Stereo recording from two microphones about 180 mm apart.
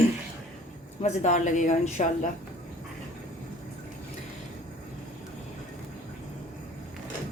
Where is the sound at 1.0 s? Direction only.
40° left (ahead or behind).